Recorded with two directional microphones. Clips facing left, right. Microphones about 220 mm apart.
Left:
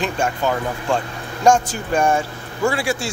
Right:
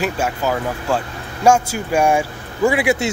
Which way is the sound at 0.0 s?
5° right (ahead or behind).